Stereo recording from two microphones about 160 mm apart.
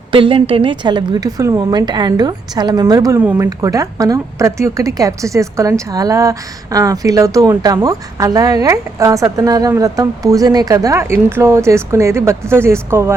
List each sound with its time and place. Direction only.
0.1 s speech: 35° right (ahead or behind); by 13.1 s 15° right (ahead or behind)